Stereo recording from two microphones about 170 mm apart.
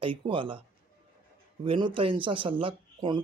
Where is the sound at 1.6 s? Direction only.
30° right (ahead or behind).